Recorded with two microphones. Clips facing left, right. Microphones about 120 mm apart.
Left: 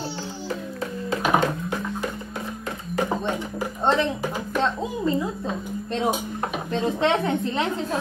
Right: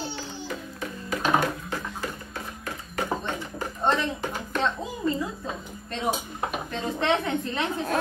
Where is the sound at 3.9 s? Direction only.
5° left (ahead or behind).